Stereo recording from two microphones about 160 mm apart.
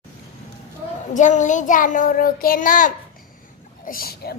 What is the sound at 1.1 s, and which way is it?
A child's voice, 50° left (ahead or behind).